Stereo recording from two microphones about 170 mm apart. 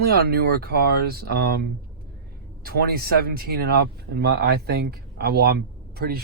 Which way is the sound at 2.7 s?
65° right (ahead or behind).